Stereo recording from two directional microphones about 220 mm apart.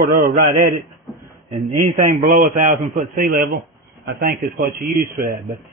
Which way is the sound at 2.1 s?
40° right (ahead or behind).